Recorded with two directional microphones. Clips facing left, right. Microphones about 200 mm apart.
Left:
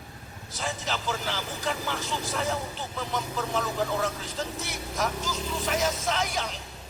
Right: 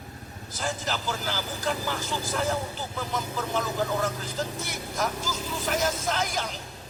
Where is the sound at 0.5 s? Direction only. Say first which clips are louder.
Right 1 dB; centre (ahead or behind).